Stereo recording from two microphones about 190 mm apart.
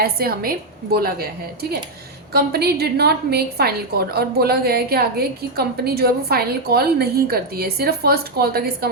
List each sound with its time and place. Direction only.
0.0 s a woman's voice: 55° right (ahead or behind)
2.3 s a woman's voice: 55° right (ahead or behind)